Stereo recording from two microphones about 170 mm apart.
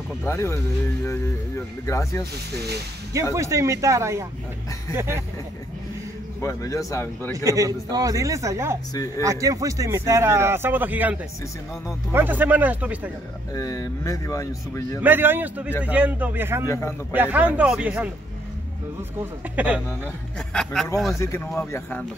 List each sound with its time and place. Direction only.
0.2 s speech: 15° left (ahead or behind)
1.9 s speech: 15° left (ahead or behind)
3.3 s a man's voice: 20° right (ahead or behind)
6.4 s speech: 20° left (ahead or behind)
7.4 s a man's voice: 20° right (ahead or behind)
13.6 s speech: 20° left (ahead or behind)
15.0 s a man's voice: 10° right (ahead or behind)
16.6 s speech: 15° left (ahead or behind)
17.1 s a man's voice: 10° right (ahead or behind)
19.5 s a man's voice: 10° right (ahead or behind)
21.2 s speech: 15° left (ahead or behind)